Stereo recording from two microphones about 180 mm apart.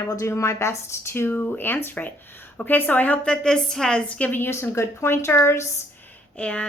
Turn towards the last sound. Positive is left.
turn(degrees=5)  # may be behind; listen again after turning